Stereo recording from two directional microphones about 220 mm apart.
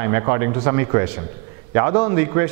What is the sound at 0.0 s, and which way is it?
A man's voice, 15° right (ahead or behind).